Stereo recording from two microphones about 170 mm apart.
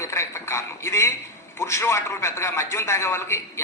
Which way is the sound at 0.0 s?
15° left (ahead or behind).